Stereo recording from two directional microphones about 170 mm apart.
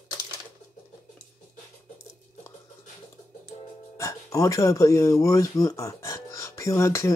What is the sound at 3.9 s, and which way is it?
Speech, 20° left (ahead or behind).